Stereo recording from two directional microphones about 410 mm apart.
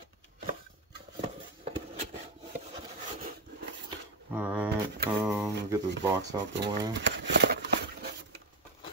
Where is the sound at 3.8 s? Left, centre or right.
Centre.